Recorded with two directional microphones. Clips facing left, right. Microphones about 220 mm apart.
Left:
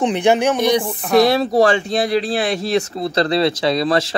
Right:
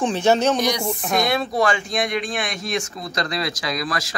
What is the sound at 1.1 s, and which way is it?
Speech, 35° left (ahead or behind).